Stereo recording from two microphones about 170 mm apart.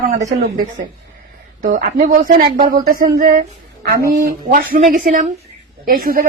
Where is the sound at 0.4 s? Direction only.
55° right (ahead or behind).